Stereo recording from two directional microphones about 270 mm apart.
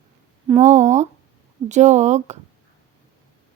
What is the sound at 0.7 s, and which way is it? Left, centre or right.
Speech, right.